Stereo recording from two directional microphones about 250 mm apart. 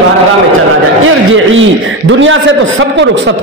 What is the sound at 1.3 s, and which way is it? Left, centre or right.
A man's voice, right.